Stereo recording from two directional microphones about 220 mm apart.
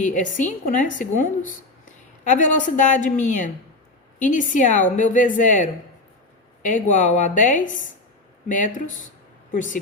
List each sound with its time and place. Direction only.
0.0 s a woman's voice: 35° left (ahead or behind)